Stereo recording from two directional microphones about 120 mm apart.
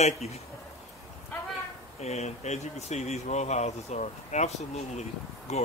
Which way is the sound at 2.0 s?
65° left (ahead or behind).